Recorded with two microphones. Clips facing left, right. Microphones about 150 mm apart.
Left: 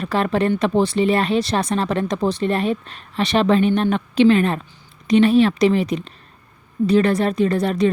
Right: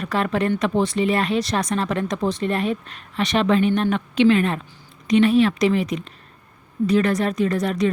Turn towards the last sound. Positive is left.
turn(degrees=30)  # may be behind; listen again after turning